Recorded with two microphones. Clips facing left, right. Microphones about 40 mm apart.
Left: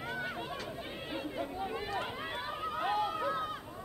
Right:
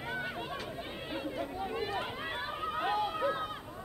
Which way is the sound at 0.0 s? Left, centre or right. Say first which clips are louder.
Right 1 dB; centre.